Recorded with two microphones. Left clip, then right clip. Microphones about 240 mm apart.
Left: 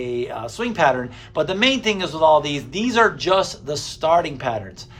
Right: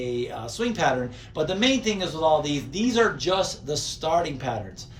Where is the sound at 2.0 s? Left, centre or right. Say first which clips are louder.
Left 7 dB; left.